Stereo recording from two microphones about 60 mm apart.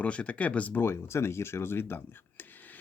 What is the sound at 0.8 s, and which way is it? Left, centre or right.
Speech, left.